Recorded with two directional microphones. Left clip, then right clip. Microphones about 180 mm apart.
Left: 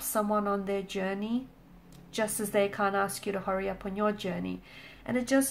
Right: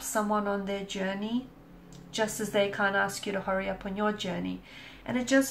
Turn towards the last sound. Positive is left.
turn(degrees=40)  # may be behind; listen again after turning